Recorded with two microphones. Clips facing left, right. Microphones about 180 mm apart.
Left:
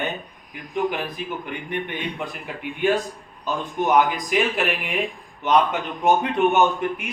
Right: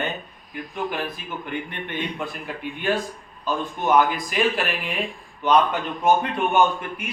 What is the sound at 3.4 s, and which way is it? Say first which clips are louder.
A man's voice: left 1 dB; 15° left (ahead or behind).